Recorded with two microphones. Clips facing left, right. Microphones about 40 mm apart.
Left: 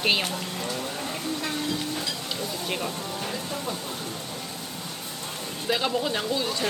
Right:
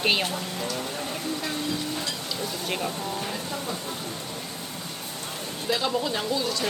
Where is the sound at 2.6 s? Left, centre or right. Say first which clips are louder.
Right 1 dB; centre.